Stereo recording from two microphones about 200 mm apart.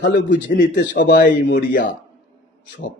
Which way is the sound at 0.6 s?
40° left (ahead or behind).